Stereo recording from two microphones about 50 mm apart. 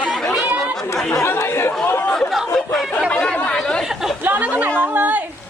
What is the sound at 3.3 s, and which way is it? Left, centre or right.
Chatter, left.